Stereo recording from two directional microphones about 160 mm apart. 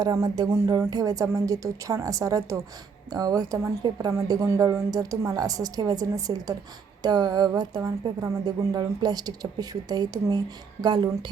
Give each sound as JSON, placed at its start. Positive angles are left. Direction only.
{"t": 0.0, "sound": "speech", "side_deg": -20}